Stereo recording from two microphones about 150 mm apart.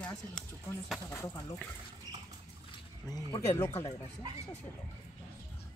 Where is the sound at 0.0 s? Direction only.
5° left (ahead or behind).